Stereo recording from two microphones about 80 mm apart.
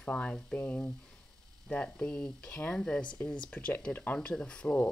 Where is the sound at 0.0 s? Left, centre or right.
Centre.